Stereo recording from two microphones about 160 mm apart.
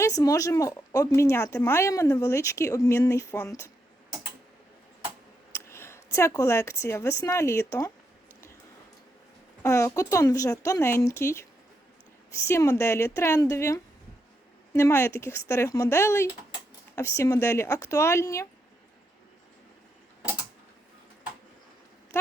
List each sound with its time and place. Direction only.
0.0 s speech: 20° left (ahead or behind)
5.5 s speech: 15° left (ahead or behind)
9.6 s speech: 20° left (ahead or behind)